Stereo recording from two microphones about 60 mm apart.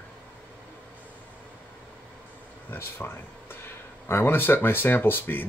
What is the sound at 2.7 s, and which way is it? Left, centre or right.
Speech, left.